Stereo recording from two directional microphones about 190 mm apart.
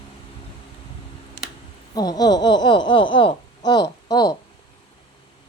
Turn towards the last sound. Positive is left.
turn(degrees=20)  # may be behind; listen again after turning